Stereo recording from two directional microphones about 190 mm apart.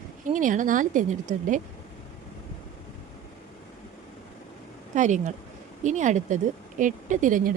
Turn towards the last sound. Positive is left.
turn(degrees=-45)  # may be behind; listen again after turning